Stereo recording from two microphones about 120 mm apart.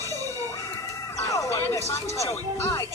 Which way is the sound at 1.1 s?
25° left (ahead or behind).